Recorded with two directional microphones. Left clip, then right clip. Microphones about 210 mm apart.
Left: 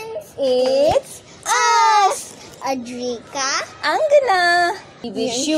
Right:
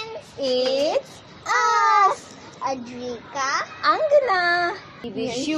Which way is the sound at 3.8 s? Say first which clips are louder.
Left 3 dB; centre (ahead or behind).